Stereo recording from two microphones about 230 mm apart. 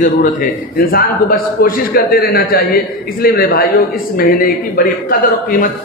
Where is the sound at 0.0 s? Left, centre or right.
Left.